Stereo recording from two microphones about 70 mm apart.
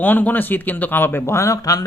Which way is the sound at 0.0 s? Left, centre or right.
Left.